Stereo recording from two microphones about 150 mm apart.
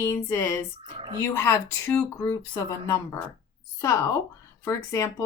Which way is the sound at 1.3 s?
15° left (ahead or behind).